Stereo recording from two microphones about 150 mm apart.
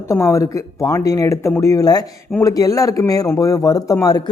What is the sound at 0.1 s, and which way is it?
Speech, 20° left (ahead or behind).